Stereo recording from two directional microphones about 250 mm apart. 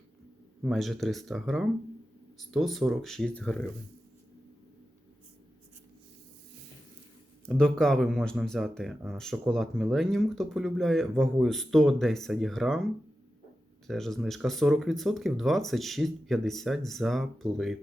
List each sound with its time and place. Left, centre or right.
0.6 s speech: centre
7.4 s speech: centre